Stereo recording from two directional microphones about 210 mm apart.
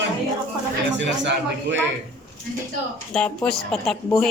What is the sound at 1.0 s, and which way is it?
Speech, 60° right (ahead or behind).